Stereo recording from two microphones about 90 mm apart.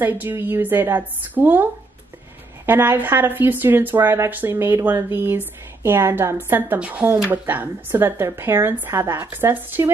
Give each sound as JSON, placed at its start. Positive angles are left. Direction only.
{"t": 0.0, "sound": "a woman's voice", "side_deg": -25}